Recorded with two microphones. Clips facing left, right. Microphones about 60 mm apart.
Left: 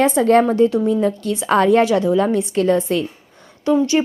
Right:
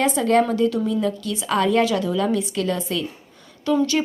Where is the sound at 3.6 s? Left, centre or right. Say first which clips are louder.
Left 4 dB; left.